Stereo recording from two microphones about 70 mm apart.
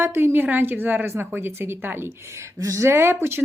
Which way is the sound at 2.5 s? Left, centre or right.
Right.